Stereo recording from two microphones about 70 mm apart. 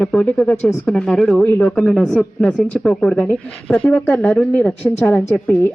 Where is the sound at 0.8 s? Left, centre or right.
Centre.